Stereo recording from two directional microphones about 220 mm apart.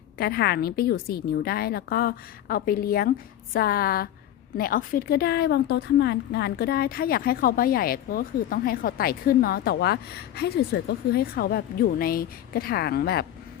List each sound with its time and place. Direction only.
0.2 s a woman's voice: 45° left (ahead or behind)